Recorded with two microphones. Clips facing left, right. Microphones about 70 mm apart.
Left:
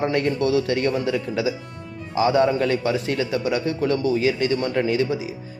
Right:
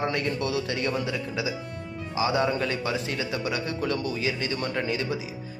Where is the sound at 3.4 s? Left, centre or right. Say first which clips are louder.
Left 6 dB; left.